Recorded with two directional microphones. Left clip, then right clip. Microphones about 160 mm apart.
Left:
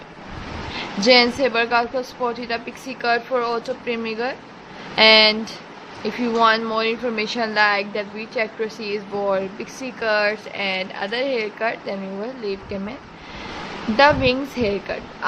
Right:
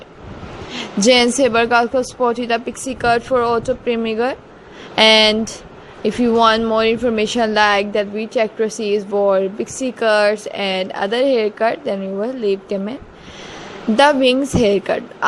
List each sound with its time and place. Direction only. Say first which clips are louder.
0.7 s speech: right 2 dB; 50° right (ahead or behind)